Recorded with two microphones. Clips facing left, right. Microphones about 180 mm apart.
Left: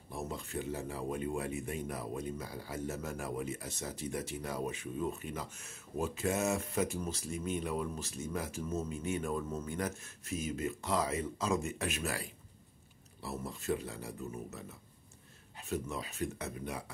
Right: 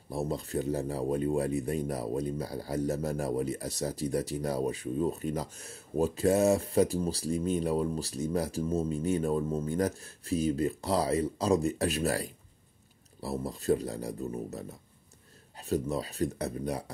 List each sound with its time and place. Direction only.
0.1 s speech: 35° right (ahead or behind)